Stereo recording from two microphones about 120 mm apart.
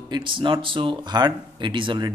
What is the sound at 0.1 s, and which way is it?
Speech, 40° right (ahead or behind).